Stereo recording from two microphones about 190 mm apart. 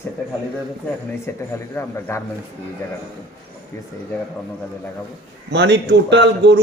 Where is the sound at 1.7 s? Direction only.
15° left (ahead or behind).